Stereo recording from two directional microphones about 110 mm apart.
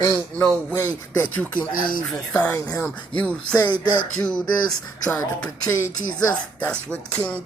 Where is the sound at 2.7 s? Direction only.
10° left (ahead or behind).